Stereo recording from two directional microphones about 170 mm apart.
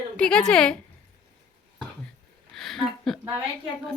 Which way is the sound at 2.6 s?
Centre (ahead or behind).